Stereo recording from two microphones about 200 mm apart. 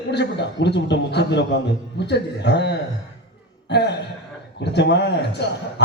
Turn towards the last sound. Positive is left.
turn(degrees=60)  # may be behind; listen again after turning